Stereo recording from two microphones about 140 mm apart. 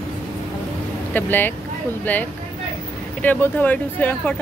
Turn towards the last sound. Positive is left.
turn(degrees=10)  # may be behind; listen again after turning